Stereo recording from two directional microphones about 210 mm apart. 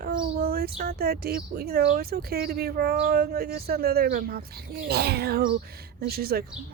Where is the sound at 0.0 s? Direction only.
45° right (ahead or behind).